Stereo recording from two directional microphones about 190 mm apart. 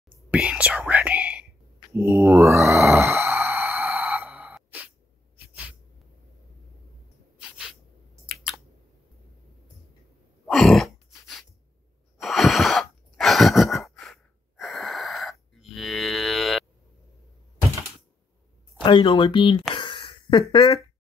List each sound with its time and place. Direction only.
0.3 s whispering: 5° right (ahead or behind)
2.0 s groan: 15° right (ahead or behind)
10.4 s a sound: centre (ahead or behind)
12.2 s sigh: centre (ahead or behind)
15.6 s mantra: centre (ahead or behind)
18.8 s speech: 25° left (ahead or behind)
19.7 s a sound: 25° left (ahead or behind)